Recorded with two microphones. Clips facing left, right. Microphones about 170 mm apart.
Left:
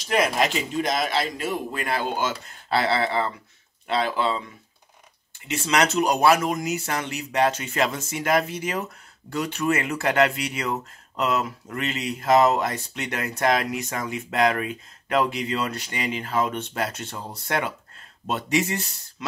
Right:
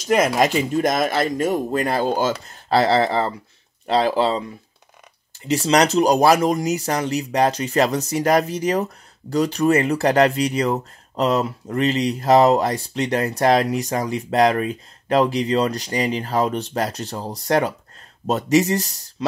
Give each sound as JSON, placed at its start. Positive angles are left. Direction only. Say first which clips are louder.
{"t": 0.0, "sound": "speech", "louder": "right 5 dB", "side_deg": -45}
{"t": 5.7, "sound": "speech", "louder": "right 5 dB", "side_deg": -35}